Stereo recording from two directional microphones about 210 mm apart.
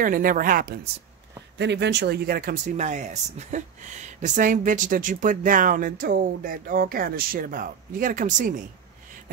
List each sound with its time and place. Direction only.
0.0 s speech: 40° right (ahead or behind)
1.6 s speech: 55° right (ahead or behind)